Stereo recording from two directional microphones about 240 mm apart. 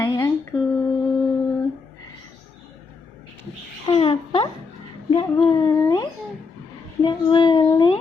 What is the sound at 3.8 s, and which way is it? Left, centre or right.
Speech, left.